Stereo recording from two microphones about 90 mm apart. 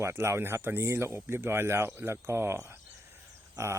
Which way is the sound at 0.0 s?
30° right (ahead or behind).